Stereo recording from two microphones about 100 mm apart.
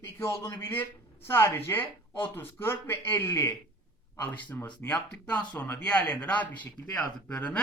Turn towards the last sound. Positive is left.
turn(degrees=15)  # may be behind; listen again after turning